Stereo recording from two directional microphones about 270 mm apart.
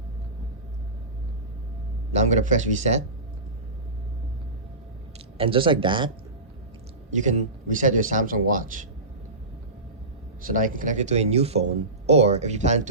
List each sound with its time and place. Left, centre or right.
2.1 s speech: right
5.4 s speech: centre
7.1 s speech: right
10.4 s speech: right